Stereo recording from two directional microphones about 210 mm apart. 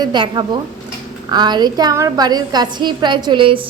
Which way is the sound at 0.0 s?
20° right (ahead or behind).